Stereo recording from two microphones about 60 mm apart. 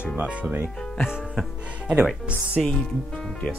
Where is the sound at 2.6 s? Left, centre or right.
Centre.